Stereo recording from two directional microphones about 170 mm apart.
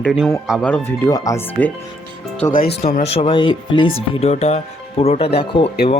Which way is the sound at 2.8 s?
40° left (ahead or behind).